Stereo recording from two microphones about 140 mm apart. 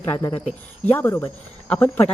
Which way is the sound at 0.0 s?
20° left (ahead or behind).